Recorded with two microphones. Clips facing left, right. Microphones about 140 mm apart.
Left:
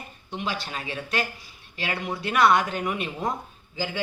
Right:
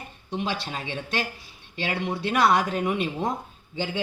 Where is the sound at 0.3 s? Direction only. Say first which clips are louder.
Right 2 dB; 35° right (ahead or behind).